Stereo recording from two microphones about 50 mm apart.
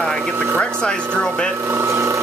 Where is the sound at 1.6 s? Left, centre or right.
Right.